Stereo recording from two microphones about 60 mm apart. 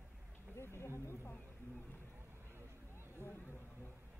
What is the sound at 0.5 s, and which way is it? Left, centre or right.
Speech, left.